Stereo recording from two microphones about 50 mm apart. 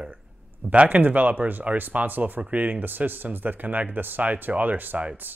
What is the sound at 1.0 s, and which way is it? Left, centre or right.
A man's voice, right.